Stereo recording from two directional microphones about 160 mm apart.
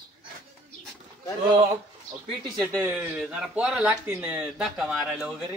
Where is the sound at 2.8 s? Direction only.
10° right (ahead or behind).